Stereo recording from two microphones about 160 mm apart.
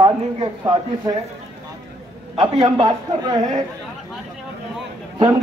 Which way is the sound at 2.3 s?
30° right (ahead or behind).